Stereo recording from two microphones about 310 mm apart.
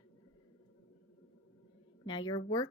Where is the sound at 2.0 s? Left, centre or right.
Centre.